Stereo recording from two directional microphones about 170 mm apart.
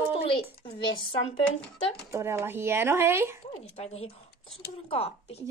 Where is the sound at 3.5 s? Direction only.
35° left (ahead or behind).